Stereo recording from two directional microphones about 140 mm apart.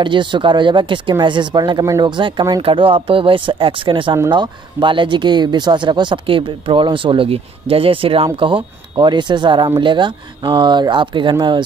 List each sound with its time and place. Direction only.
0.0 s speech: 35° right (ahead or behind)